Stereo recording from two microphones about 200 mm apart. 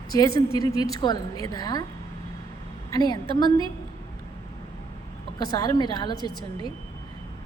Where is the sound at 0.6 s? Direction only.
20° left (ahead or behind).